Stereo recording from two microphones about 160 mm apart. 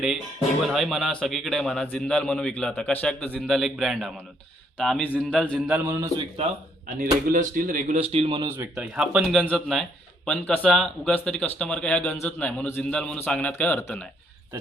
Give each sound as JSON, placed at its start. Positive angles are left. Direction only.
{"t": 0.6, "sound": "a man's voice", "side_deg": 0}
{"t": 5.5, "sound": "a man's voice", "side_deg": -10}
{"t": 6.1, "sound": "a man's voice", "side_deg": -40}
{"t": 6.8, "sound": "speech", "side_deg": -60}
{"t": 7.9, "sound": "a man's voice", "side_deg": -35}
{"t": 8.7, "sound": "a man's voice", "side_deg": -5}